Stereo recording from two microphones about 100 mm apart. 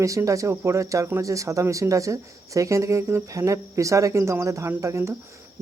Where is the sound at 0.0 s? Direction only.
30° right (ahead or behind).